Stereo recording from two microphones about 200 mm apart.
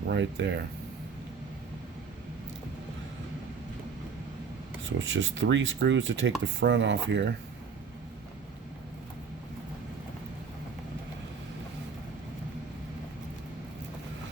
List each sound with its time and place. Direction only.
0.1 s speech: 60° right (ahead or behind)
4.9 s speech: 70° right (ahead or behind)